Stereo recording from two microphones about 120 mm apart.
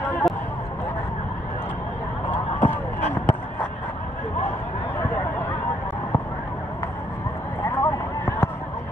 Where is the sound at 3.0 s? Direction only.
70° left (ahead or behind).